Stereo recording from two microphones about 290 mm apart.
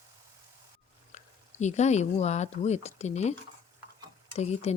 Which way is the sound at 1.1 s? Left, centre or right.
Left.